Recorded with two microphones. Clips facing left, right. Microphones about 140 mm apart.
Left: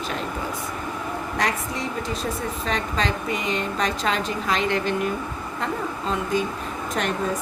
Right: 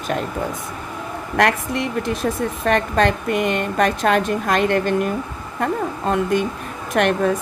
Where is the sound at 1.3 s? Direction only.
65° right (ahead or behind).